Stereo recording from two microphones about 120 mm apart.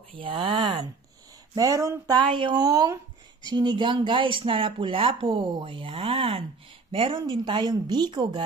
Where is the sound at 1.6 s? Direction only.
30° right (ahead or behind).